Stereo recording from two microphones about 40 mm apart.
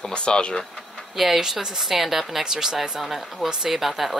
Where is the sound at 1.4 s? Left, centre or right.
Centre.